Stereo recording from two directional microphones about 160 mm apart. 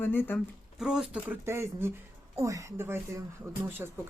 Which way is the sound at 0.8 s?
5° right (ahead or behind).